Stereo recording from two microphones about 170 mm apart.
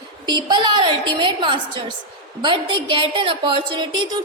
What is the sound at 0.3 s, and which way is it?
A woman's voice, 25° right (ahead or behind).